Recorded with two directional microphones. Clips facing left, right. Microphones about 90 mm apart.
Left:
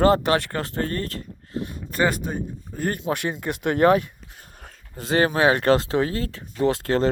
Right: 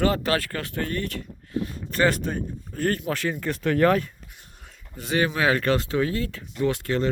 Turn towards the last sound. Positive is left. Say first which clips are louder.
# left 3 dB
turn(degrees=35)  # may be behind; listen again after turning